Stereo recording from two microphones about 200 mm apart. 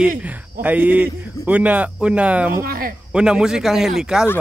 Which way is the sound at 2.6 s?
45° right (ahead or behind).